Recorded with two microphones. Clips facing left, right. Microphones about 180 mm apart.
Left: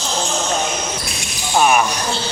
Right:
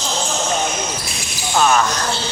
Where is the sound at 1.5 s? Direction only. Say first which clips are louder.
Left 1 dB; 15° left (ahead or behind).